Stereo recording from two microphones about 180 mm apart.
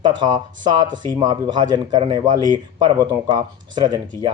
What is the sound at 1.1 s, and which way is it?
Speech, 25° right (ahead or behind).